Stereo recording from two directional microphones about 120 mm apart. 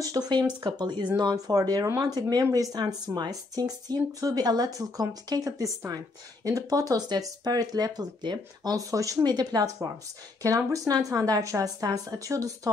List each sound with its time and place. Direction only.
0.0 s speech: 35° right (ahead or behind)